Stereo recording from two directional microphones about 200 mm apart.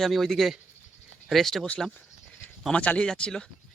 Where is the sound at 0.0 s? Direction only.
Centre (ahead or behind).